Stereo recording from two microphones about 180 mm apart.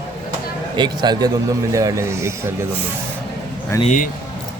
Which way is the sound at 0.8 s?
20° right (ahead or behind).